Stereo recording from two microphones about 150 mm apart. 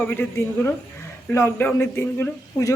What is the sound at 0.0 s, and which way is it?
A woman's voice, 10° left (ahead or behind).